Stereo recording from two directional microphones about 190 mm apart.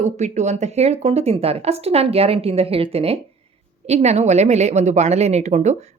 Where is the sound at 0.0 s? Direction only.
35° right (ahead or behind).